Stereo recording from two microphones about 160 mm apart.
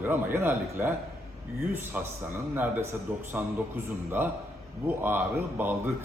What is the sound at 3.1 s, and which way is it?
Speech, 10° right (ahead or behind).